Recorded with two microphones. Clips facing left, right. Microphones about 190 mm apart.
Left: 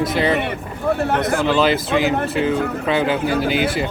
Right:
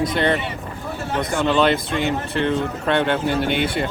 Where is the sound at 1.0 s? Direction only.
60° left (ahead or behind).